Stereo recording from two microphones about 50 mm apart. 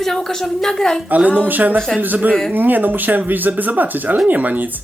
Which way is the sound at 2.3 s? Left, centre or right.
Centre.